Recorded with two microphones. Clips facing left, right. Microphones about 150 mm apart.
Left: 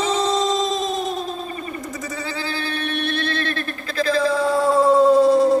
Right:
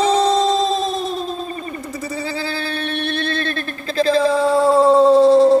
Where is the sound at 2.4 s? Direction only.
30° right (ahead or behind).